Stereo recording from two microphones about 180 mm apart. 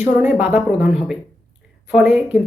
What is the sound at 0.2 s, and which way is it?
Speech, 10° right (ahead or behind).